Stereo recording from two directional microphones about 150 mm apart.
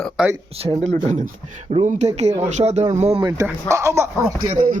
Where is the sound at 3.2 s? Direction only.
20° right (ahead or behind).